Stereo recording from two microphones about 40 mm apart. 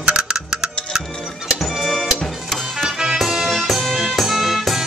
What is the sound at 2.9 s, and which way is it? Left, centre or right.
Music, centre.